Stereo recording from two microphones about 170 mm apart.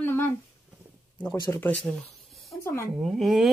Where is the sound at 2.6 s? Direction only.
15° left (ahead or behind).